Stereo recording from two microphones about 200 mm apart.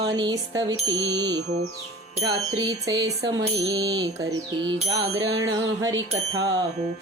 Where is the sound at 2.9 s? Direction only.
55° right (ahead or behind).